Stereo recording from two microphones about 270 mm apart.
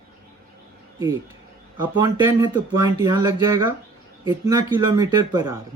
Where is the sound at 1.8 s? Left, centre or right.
Centre.